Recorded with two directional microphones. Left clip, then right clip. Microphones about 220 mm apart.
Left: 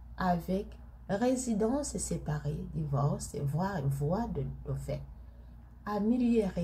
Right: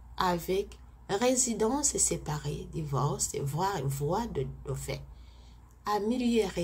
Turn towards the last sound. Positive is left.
turn(degrees=-25)  # may be behind; listen again after turning